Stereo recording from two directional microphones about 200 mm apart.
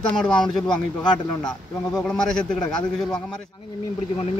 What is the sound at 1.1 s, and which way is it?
Speech, 20° left (ahead or behind).